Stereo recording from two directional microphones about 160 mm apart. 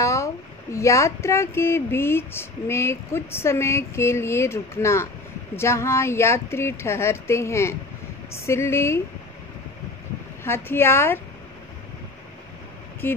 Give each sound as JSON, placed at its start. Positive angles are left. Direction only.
{"t": 0.0, "sound": "speech", "side_deg": 20}
{"t": 10.4, "sound": "speech", "side_deg": 15}
{"t": 13.0, "sound": "speech", "side_deg": 15}